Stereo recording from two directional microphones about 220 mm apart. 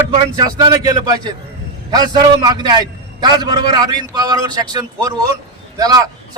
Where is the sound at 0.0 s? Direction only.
15° right (ahead or behind).